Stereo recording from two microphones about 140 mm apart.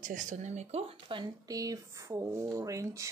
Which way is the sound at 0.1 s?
65° right (ahead or behind).